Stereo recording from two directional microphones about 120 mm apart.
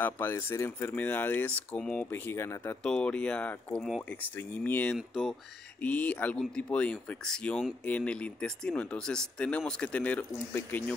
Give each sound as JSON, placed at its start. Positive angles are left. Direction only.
{"t": 0.0, "sound": "speech", "side_deg": 20}
{"t": 2.8, "sound": "speech", "side_deg": 5}
{"t": 4.9, "sound": "speech", "side_deg": -5}
{"t": 5.8, "sound": "speech", "side_deg": 10}